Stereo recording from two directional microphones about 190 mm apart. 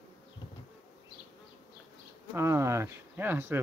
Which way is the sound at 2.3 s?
15° right (ahead or behind).